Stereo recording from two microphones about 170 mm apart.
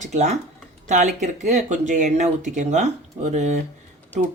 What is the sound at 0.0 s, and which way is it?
Speech, 45° right (ahead or behind).